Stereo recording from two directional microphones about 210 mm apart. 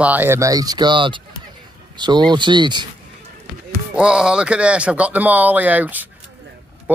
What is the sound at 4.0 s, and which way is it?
Speech, 5° right (ahead or behind).